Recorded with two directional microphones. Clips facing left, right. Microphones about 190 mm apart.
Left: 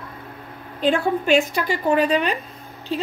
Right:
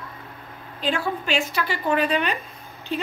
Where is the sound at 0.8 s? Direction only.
50° left (ahead or behind).